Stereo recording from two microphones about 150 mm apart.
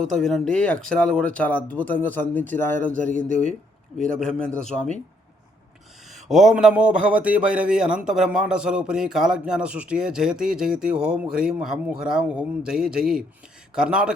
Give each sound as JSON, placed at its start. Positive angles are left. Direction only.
{"t": 0.0, "sound": "speech", "side_deg": 5}
{"t": 3.1, "sound": "speech", "side_deg": -60}
{"t": 3.9, "sound": "speech", "side_deg": 5}
{"t": 6.1, "sound": "a man's voice", "side_deg": 0}